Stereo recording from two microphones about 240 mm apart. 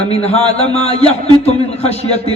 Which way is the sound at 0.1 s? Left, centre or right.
Left.